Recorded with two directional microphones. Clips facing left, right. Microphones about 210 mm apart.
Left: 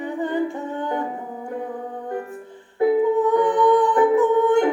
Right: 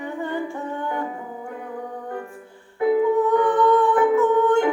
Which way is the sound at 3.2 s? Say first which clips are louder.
Left 1 dB; 15° left (ahead or behind).